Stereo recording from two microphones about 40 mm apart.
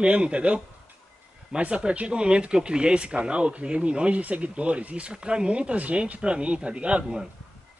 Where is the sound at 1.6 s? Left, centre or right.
Right.